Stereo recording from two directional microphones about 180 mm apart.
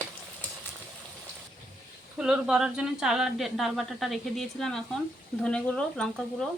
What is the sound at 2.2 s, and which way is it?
Speech, 5° right (ahead or behind).